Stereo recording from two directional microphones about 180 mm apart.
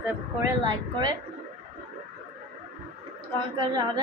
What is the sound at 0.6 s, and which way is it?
Speech, 20° right (ahead or behind).